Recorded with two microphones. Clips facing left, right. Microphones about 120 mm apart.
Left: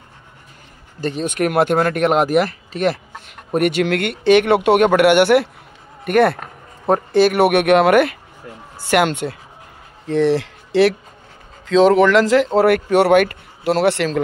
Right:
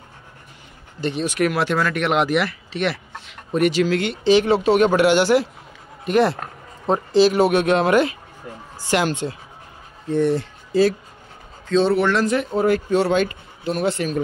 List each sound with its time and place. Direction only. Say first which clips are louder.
1.0 s speech: left 1 dB; 45° left (ahead or behind); by 9.4 s 65° left (ahead or behind)
10.0 s speech: left 3 dB; 90° left
11.6 s a man's voice: left 6 dB; 90° left
12.5 s speech: left 2 dB; 70° left (ahead or behind)